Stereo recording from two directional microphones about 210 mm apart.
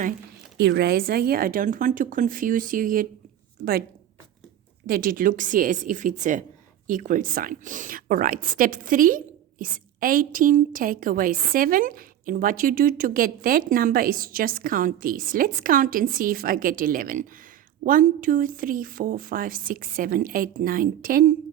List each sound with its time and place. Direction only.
0.6 s a woman's voice: 50° right (ahead or behind)
4.9 s a woman's voice: 45° right (ahead or behind)